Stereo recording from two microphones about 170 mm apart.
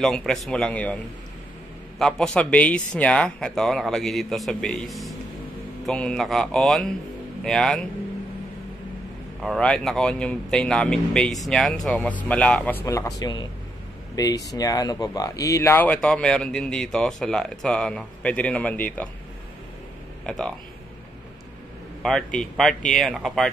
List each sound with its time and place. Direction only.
0.0 s speech: 5° left (ahead or behind)
2.0 s speech: 5° left (ahead or behind)
9.4 s speech: centre (ahead or behind)
20.2 s speech: 5° left (ahead or behind)
22.0 s speech: 5° left (ahead or behind)